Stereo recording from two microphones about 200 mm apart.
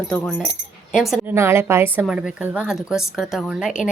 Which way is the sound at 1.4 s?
10° right (ahead or behind).